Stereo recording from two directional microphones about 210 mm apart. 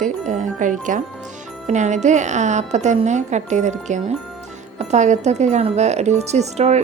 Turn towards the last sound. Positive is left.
turn(degrees=-30)  # may be behind; listen again after turning